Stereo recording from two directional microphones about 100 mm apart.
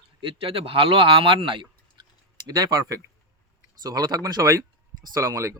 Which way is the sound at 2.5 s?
40° right (ahead or behind).